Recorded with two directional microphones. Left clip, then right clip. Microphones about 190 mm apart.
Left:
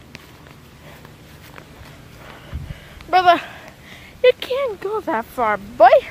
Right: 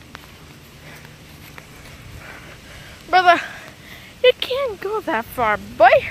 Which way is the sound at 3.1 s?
5° left (ahead or behind).